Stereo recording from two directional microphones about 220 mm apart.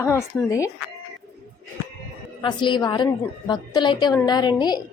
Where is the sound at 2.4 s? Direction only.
20° left (ahead or behind).